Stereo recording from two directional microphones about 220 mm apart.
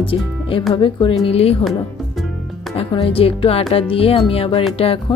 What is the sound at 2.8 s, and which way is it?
Speech, 25° left (ahead or behind).